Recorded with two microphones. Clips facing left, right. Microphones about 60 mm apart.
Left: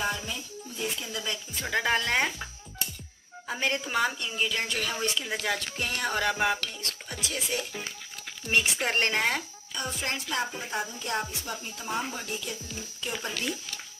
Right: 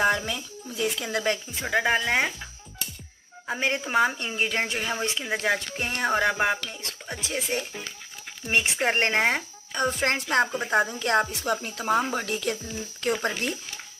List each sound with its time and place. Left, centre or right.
0.0 s a sound: right
1.5 s speech: centre
3.4 s speech: right
4.2 s a woman's voice: right
4.6 s speech: right
9.8 s speech: right